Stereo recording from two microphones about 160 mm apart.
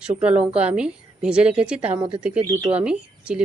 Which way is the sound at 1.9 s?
25° right (ahead or behind).